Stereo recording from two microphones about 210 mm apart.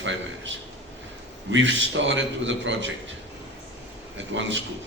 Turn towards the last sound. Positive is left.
turn(degrees=-60)  # may be behind; listen again after turning